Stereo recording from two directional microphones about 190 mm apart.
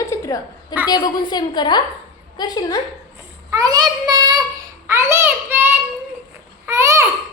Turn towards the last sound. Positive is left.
turn(degrees=-15)  # may be behind; listen again after turning